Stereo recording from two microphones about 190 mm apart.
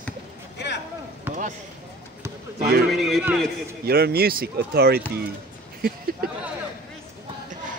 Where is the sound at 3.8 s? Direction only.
55° right (ahead or behind).